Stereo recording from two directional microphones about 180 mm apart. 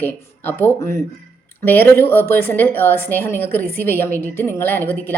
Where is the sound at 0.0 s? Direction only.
10° left (ahead or behind).